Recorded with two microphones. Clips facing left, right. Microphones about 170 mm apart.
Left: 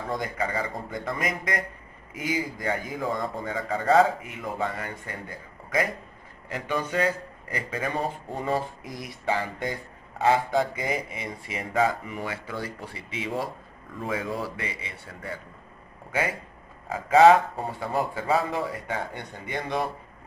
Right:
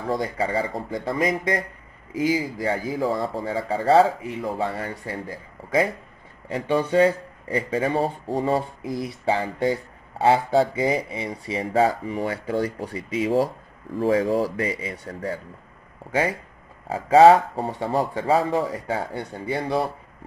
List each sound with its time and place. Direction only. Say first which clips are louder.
0.1 s a man's voice: right 5 dB; 30° right (ahead or behind)
16.9 s a man's voice: right 3 dB; 35° right (ahead or behind)